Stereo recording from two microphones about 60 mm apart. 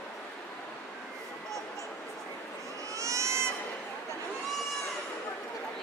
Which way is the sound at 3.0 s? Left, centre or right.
Right.